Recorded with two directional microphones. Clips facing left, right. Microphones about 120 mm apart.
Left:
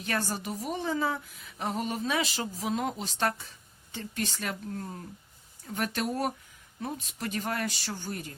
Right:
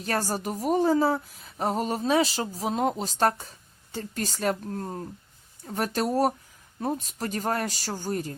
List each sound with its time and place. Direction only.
0.0 s a woman's voice: 40° right (ahead or behind)